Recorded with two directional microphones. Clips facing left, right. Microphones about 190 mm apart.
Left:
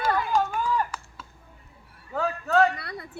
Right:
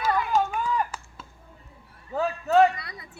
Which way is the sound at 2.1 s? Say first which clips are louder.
Right 2 dB; 15° right (ahead or behind).